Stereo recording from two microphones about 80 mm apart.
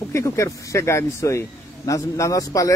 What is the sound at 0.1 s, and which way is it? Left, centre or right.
Speech, left.